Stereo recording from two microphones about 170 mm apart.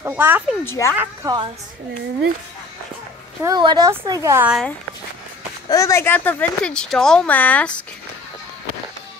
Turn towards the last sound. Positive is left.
turn(degrees=10)  # may be behind; listen again after turning